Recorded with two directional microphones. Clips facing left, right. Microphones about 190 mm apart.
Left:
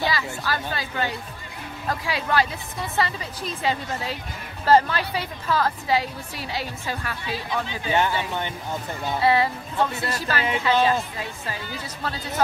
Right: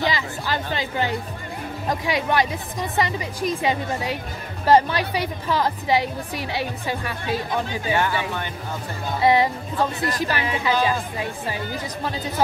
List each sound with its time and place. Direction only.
0.0 s a woman's voice: 20° right (ahead or behind)
7.9 s speech: 20° left (ahead or behind)
9.2 s a woman's voice: 15° right (ahead or behind)